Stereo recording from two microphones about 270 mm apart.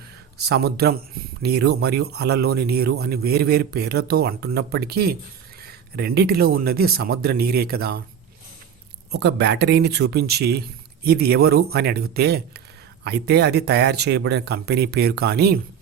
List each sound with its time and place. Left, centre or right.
0.3 s a man's voice: right
9.1 s a man's voice: right